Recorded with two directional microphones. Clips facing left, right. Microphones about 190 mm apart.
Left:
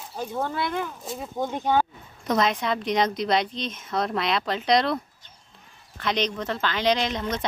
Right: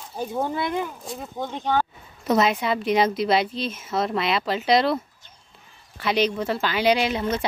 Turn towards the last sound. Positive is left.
turn(degrees=-10)  # may be behind; listen again after turning